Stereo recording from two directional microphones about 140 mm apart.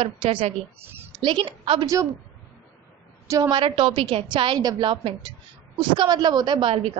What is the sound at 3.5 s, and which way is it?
A woman's voice, 40° right (ahead or behind).